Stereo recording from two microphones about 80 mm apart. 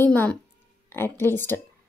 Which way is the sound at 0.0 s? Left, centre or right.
Left.